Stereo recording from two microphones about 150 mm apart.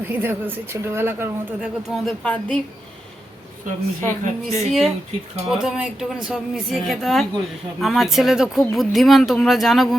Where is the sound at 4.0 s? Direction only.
15° left (ahead or behind).